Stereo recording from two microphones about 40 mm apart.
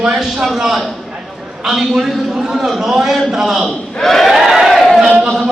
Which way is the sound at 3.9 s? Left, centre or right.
Centre.